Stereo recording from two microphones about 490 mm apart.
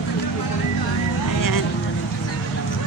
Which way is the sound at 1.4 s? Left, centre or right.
Left.